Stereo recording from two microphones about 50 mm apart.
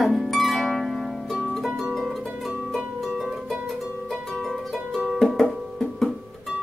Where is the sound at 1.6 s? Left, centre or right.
Centre.